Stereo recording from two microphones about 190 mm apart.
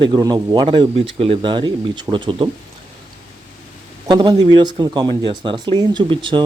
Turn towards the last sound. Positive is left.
turn(degrees=-25)  # may be behind; listen again after turning